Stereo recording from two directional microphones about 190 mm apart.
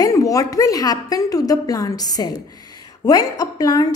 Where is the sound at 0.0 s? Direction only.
20° left (ahead or behind).